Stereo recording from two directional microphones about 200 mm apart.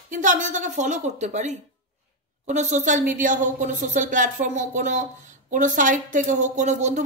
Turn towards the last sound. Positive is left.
turn(degrees=-35)  # may be behind; listen again after turning